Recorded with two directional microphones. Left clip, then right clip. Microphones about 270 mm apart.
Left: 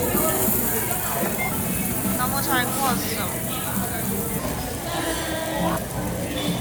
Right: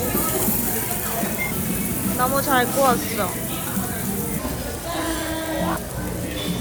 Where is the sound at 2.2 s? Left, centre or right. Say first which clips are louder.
Right 5 dB; centre.